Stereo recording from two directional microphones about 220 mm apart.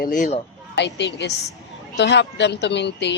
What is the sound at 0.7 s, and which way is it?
Speech, 50° left (ahead or behind).